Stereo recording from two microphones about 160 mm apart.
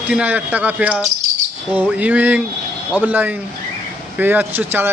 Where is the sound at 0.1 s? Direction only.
10° right (ahead or behind).